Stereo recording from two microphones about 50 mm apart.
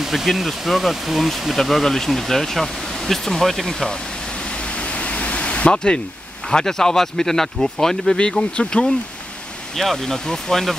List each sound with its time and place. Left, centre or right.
0.0 s speech: centre
4.5 s pink noise: left
6.5 s speech: centre
9.8 s speech: centre